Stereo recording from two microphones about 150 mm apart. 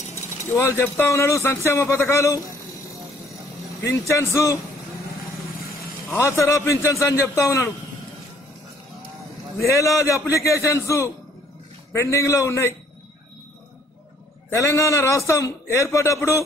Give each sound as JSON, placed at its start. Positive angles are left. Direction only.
{"t": 0.5, "sound": "speech", "side_deg": 15}
{"t": 3.8, "sound": "a man's voice", "side_deg": 20}
{"t": 6.1, "sound": "a man's voice", "side_deg": 20}
{"t": 9.7, "sound": "a man's voice", "side_deg": 20}
{"t": 14.5, "sound": "a man's voice", "side_deg": 20}